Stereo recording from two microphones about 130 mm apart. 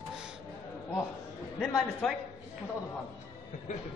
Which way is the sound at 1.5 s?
Centre (ahead or behind).